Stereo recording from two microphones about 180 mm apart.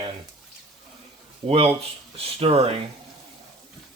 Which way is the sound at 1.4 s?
35° right (ahead or behind).